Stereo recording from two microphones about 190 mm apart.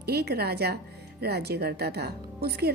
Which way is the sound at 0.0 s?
55° right (ahead or behind).